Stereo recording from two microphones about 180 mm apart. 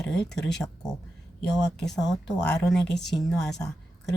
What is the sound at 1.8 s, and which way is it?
Speech, centre (ahead or behind).